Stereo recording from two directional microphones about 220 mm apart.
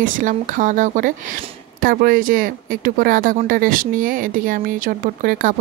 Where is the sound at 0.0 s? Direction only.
35° right (ahead or behind).